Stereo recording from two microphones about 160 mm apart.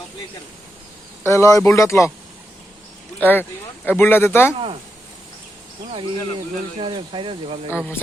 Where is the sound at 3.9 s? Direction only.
15° left (ahead or behind).